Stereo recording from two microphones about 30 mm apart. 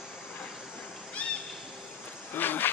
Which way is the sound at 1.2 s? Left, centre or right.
Left.